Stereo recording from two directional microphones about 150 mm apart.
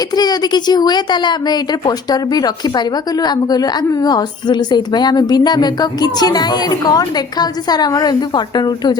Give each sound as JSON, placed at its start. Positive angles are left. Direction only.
{"t": 0.2, "sound": "a woman's voice", "side_deg": 25}